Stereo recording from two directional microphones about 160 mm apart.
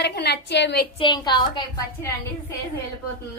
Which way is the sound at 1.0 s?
30° left (ahead or behind).